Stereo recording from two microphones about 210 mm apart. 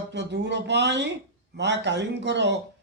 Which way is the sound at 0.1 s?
55° right (ahead or behind).